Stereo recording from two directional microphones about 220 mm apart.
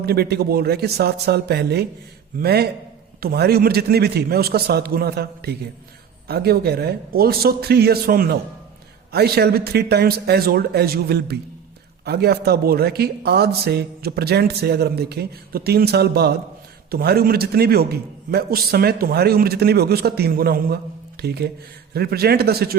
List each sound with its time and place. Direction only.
0.0 s speech: 45° right (ahead or behind)